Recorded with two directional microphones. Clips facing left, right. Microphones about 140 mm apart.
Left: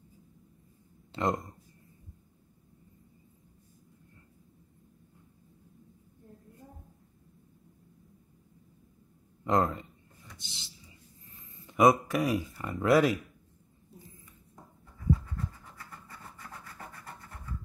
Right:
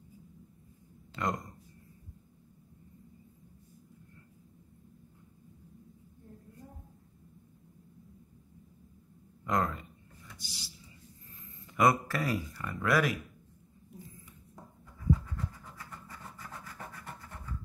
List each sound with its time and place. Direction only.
1.1 s speech: 25° left (ahead or behind)
9.4 s speech: 25° left (ahead or behind)
10.3 s a sound: 25° left (ahead or behind)
11.6 s speech: 20° left (ahead or behind)